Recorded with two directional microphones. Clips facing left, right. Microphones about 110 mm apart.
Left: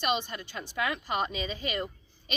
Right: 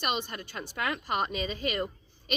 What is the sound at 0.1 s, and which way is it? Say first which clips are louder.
A woman's voice: left 2 dB; 50° right (ahead or behind).